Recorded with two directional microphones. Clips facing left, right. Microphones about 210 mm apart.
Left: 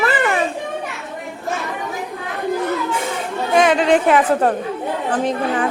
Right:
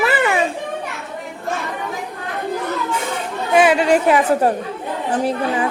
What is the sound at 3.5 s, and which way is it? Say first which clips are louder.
Speech: even; 10° right (ahead or behind).